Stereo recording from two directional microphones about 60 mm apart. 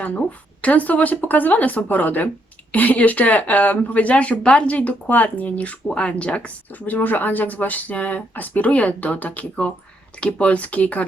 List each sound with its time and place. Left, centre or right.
0.0 s speech: left